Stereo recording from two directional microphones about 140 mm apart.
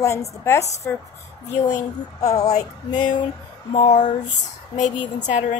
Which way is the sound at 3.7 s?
55° left (ahead or behind).